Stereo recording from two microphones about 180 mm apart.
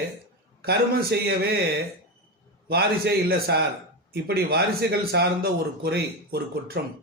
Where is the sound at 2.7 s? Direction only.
60° right (ahead or behind).